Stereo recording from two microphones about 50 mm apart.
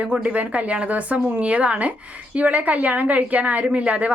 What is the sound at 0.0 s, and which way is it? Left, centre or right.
A woman's voice, right.